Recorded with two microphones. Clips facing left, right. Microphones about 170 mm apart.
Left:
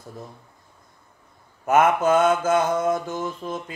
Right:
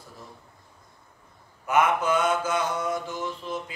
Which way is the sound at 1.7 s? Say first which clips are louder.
Left 5 dB; 45° left (ahead or behind).